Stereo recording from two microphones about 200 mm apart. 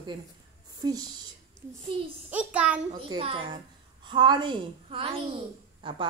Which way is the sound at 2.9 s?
25° right (ahead or behind).